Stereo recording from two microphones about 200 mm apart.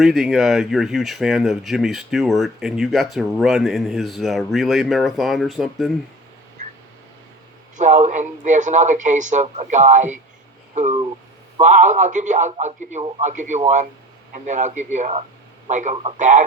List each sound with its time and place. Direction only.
0.0 s speech: centre (ahead or behind)
6.6 s a sound: 35° right (ahead or behind)
7.8 s a man's voice: 35° right (ahead or behind)